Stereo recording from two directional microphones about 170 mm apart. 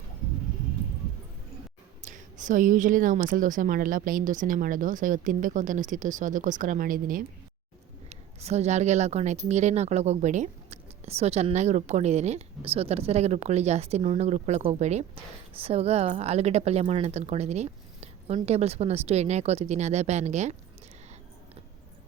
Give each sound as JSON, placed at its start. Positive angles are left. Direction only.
{"t": 2.0, "sound": "speech", "side_deg": -45}
{"t": 8.1, "sound": "speech", "side_deg": -40}